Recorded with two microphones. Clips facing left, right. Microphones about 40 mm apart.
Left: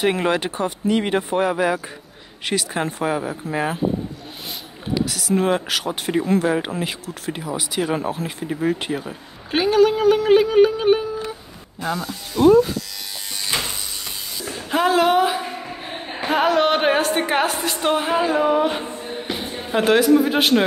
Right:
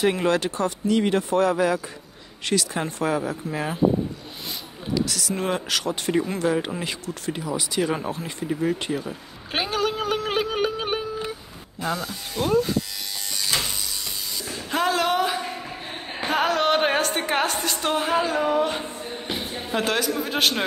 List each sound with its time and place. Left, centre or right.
0.0 s speech: centre
4.9 s speech: centre
6.2 s speech: centre
6.8 s speech: centre
8.5 s speech: centre
9.5 s music: centre
11.8 s speech: centre
13.4 s a sound: left
14.4 s a woman's voice: centre